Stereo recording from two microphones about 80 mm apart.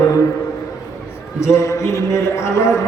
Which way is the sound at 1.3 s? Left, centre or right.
Left.